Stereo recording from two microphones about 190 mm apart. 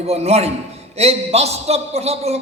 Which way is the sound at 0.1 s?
35° right (ahead or behind).